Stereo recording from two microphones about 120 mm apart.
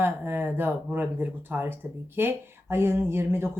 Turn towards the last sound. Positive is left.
turn(degrees=-20)  # may be behind; listen again after turning